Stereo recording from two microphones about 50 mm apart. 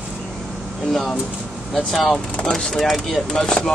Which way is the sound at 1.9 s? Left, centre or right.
Centre.